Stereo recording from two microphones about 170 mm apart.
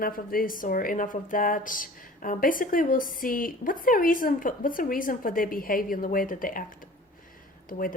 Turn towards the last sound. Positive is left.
turn(degrees=55)  # may be behind; listen again after turning